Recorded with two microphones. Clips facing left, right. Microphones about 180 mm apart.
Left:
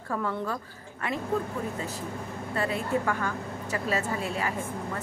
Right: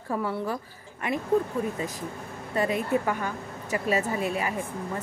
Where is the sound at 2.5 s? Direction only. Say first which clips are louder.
Right 3 dB; 15° right (ahead or behind).